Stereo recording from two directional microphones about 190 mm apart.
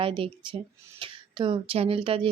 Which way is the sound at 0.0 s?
30° right (ahead or behind).